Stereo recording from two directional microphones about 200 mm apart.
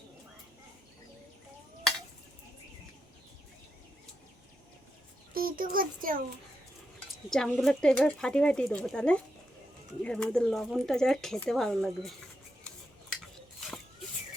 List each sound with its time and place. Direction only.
5.3 s a child's voice: 45° right (ahead or behind)
7.3 s speech: centre (ahead or behind)